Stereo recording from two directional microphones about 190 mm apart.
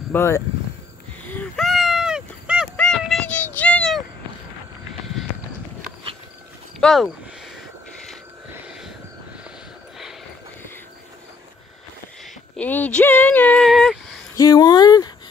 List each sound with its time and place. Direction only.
0.1 s speech: 15° left (ahead or behind)
1.3 s a sound: 5° left (ahead or behind)
6.8 s speech: centre (ahead or behind)
12.5 s speech: 10° left (ahead or behind)
14.3 s speech: 20° left (ahead or behind)